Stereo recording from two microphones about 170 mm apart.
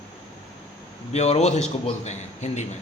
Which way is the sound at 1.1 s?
40° left (ahead or behind).